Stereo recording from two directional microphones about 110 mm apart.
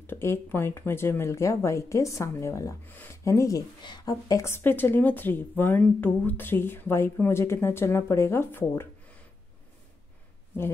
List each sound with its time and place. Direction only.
0.0 s speech: 20° left (ahead or behind)